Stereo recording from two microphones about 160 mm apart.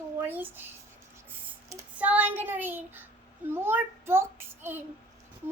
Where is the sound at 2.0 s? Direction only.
10° right (ahead or behind).